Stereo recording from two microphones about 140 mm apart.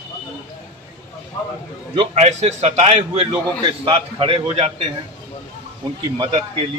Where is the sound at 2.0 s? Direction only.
50° right (ahead or behind).